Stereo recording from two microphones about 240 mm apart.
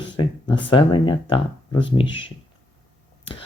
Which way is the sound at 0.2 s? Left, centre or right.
Centre.